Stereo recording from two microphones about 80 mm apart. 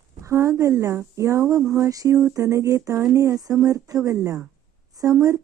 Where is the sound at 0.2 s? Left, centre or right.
Right.